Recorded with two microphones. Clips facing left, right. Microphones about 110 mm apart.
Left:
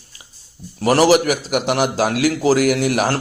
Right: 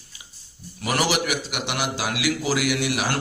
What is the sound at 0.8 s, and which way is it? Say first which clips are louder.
A man's voice: left 10 dB; 40° left (ahead or behind).